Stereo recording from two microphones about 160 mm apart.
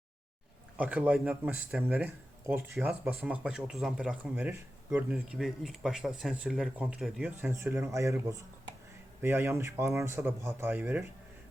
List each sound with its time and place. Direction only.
0.8 s speech: 10° right (ahead or behind)